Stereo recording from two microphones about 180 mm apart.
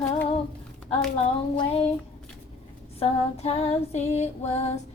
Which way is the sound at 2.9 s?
35° left (ahead or behind).